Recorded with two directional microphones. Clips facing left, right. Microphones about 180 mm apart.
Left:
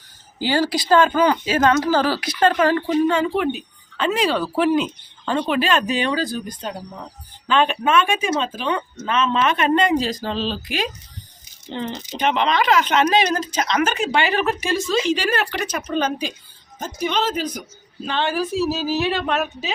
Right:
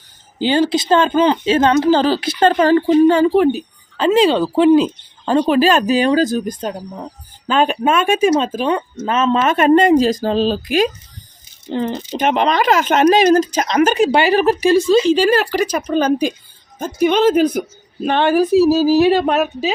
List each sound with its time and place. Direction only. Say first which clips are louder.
0.3 s speech: right 5 dB; 20° right (ahead or behind); by 16.3 s 40° right (ahead or behind)
16.8 s speech: right 9 dB; 50° right (ahead or behind)